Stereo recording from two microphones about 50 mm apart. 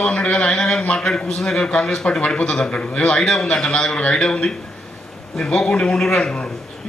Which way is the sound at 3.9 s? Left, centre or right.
Left.